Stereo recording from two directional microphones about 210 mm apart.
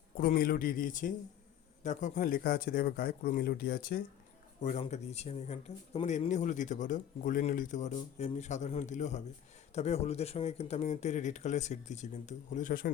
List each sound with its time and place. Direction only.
0.2 s speech: 45° left (ahead or behind)
4.6 s speech: 35° left (ahead or behind)